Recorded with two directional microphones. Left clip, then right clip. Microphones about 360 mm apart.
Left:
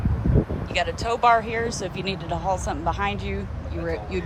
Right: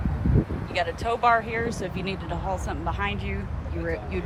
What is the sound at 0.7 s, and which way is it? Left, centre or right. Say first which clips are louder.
Speech: left 2 dB; centre.